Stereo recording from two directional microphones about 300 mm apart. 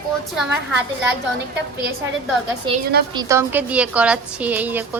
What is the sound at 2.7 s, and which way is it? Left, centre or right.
A woman's voice, centre.